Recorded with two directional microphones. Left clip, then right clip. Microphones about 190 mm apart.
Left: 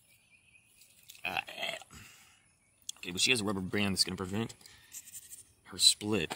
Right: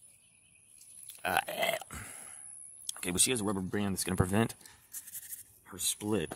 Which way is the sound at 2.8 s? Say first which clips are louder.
Right 4 dB; 30° right (ahead or behind).